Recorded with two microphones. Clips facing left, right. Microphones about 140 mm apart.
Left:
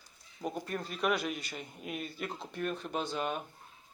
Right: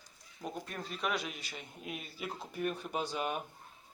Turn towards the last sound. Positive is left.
turn(degrees=-10)  # may be behind; listen again after turning